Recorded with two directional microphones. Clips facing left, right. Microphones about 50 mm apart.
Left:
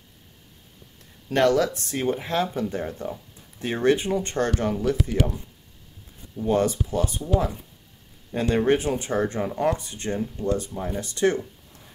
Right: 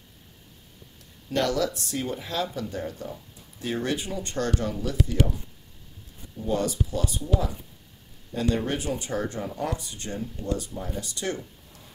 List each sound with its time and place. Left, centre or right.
1.3 s speech: left
6.4 s speech: left
8.3 s speech: left